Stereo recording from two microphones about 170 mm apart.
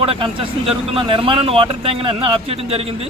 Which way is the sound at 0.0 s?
30° right (ahead or behind).